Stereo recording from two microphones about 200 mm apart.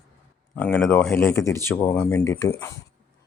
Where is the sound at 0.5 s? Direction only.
10° left (ahead or behind).